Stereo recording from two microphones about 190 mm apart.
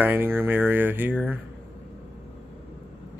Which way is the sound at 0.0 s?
10° right (ahead or behind).